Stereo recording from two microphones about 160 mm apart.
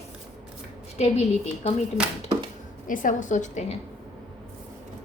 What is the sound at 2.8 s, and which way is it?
Speech, 55° left (ahead or behind).